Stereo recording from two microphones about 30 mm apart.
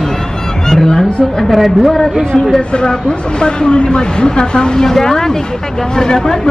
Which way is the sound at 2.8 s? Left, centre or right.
Left.